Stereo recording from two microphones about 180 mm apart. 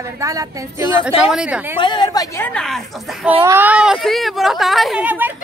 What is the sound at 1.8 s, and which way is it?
A woman's voice, 25° left (ahead or behind).